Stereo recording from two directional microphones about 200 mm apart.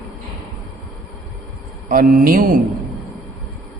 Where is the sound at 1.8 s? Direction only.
45° right (ahead or behind).